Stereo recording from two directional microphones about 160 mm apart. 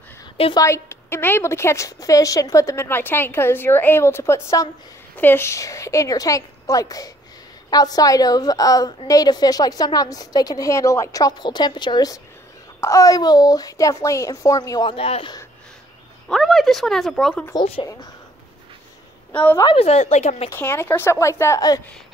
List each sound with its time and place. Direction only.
0.6 s a woman's voice: 15° left (ahead or behind); by 15.3 s 40° left (ahead or behind)
16.3 s speech: centre (ahead or behind)
19.3 s a woman's voice: 10° left (ahead or behind)
19.6 s speech: 35° left (ahead or behind)
20.4 s a woman's voice: 15° left (ahead or behind)